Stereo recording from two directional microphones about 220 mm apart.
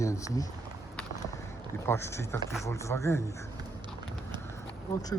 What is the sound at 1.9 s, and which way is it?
Speech, 10° left (ahead or behind).